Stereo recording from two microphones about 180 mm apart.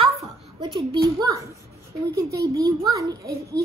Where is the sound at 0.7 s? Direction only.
20° right (ahead or behind).